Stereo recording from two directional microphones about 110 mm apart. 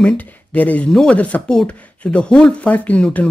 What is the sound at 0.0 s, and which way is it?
Speech, 10° left (ahead or behind).